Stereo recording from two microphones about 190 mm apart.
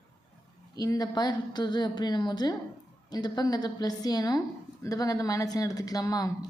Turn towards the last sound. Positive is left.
turn(degrees=20)  # may be behind; listen again after turning